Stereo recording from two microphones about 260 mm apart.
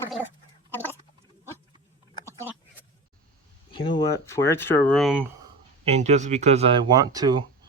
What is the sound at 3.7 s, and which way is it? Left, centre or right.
Speech, centre.